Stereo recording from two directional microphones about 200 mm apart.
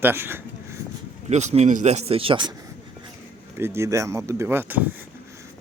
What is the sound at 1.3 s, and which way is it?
Speech, 35° right (ahead or behind).